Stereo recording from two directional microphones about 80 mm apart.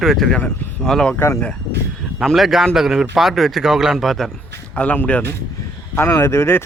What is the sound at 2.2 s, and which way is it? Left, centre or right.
Speech, centre.